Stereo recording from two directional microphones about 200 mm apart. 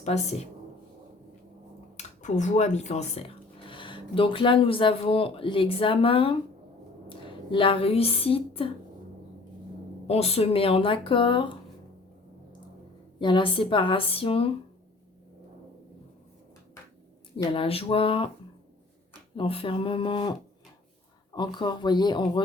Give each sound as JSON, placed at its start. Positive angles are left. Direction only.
{"t": 0.0, "sound": "a woman's voice", "side_deg": 35}
{"t": 2.0, "sound": "a woman's voice", "side_deg": 35}
{"t": 10.1, "sound": "speech", "side_deg": 30}
{"t": 13.1, "sound": "speech", "side_deg": 25}
{"t": 17.3, "sound": "speech", "side_deg": 25}
{"t": 19.4, "sound": "speech", "side_deg": 25}
{"t": 21.3, "sound": "speech", "side_deg": 20}